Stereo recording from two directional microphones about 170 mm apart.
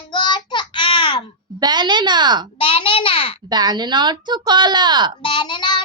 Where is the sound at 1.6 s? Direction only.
25° right (ahead or behind).